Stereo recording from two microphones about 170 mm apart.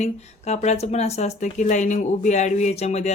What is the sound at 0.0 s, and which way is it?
Speech, 40° left (ahead or behind).